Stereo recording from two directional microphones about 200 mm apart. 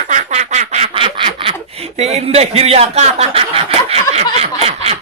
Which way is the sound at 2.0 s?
30° right (ahead or behind).